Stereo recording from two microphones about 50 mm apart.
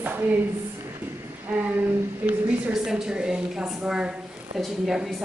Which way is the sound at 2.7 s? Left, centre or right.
Centre.